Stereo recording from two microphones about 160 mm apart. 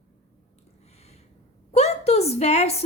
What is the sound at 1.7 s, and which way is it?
Speech, 40° left (ahead or behind).